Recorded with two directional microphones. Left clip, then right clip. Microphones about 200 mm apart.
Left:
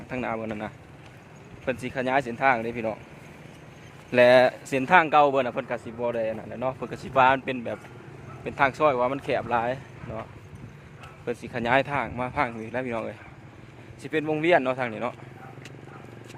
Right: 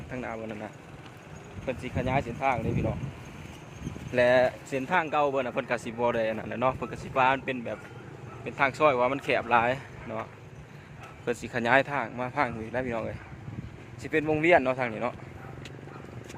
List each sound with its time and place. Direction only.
0.1 s speech: 30° left (ahead or behind)
4.1 s speech: 25° left (ahead or behind)
5.5 s speech: centre (ahead or behind)
6.9 s a man's voice: 20° left (ahead or behind); by 10.2 s 5° left (ahead or behind)
11.3 s a man's voice: 5° left (ahead or behind)
14.0 s a man's voice: 5° left (ahead or behind)